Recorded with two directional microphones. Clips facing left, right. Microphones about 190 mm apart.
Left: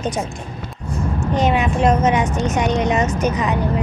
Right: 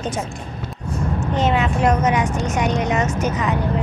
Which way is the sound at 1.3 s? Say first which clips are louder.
Left 2 dB; 15° left (ahead or behind).